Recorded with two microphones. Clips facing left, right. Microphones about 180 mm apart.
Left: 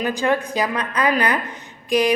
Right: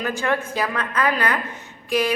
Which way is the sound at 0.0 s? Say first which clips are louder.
Left 3 dB; 15° left (ahead or behind).